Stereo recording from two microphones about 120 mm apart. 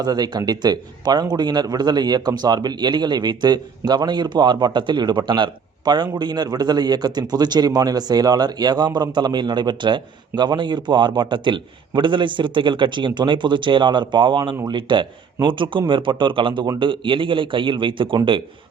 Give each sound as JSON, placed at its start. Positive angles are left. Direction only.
{"t": 0.0, "sound": "a man's voice", "side_deg": -35}